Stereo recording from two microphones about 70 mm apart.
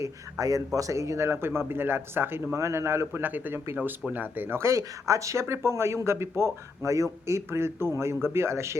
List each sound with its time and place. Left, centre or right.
0.0 s speech: right
2.6 s speech: right